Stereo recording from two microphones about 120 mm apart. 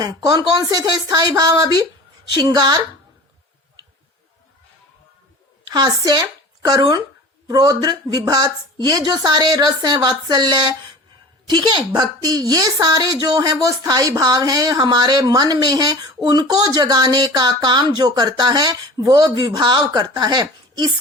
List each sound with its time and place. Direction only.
0.0 s speech: 35° right (ahead or behind)
5.6 s speech: 35° right (ahead or behind)